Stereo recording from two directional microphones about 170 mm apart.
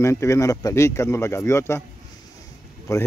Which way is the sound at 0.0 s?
15° left (ahead or behind).